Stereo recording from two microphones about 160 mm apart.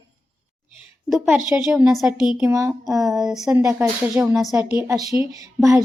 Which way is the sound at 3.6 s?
15° right (ahead or behind).